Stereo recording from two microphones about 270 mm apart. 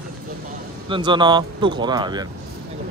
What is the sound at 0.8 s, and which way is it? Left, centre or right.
Speech, centre.